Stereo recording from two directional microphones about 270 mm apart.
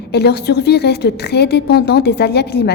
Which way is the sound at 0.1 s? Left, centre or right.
Left.